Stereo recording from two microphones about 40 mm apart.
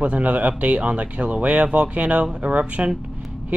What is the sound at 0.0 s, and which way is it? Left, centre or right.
Speech, right.